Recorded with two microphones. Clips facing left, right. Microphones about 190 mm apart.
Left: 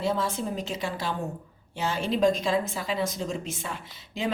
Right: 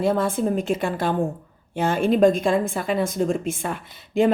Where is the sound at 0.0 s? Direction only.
55° right (ahead or behind).